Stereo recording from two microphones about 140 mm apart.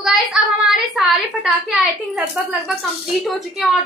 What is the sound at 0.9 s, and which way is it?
A woman's voice, centre (ahead or behind).